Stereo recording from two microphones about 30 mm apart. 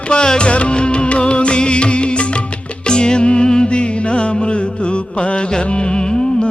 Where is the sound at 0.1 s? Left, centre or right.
Left.